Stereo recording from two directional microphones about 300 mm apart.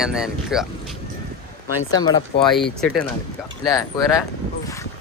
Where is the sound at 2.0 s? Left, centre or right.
Centre.